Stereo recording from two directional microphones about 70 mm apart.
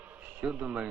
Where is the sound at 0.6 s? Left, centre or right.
Centre.